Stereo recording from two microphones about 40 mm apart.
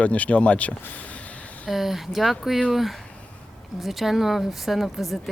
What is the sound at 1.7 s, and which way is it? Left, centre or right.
A woman's voice, centre.